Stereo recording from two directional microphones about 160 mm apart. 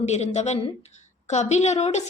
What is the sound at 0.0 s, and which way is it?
A woman's voice, 45° left (ahead or behind).